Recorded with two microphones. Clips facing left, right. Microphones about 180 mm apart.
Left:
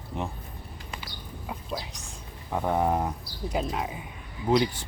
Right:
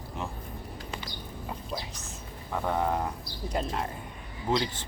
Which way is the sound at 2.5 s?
15° left (ahead or behind).